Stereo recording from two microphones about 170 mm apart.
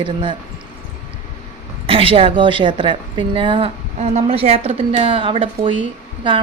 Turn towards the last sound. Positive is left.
turn(degrees=-30)  # may be behind; listen again after turning